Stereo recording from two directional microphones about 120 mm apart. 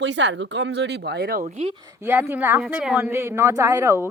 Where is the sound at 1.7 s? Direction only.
30° right (ahead or behind).